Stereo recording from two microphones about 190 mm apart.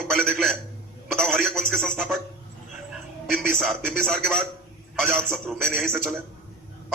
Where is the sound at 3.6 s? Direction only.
Centre (ahead or behind).